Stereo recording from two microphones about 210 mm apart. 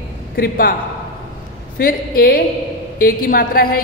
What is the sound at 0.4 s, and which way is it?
Speech, 45° left (ahead or behind).